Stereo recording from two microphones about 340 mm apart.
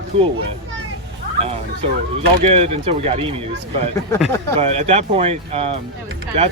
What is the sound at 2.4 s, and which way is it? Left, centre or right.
Speech, centre.